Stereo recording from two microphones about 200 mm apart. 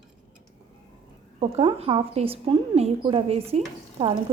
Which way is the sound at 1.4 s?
30° right (ahead or behind).